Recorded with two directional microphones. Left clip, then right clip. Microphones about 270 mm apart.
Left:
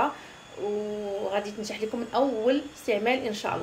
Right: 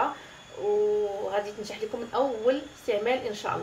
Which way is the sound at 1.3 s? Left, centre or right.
Centre.